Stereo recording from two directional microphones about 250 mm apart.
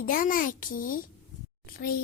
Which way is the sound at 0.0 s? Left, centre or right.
Left.